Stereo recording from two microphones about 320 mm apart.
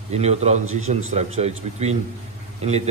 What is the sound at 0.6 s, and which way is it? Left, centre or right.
Speech, right.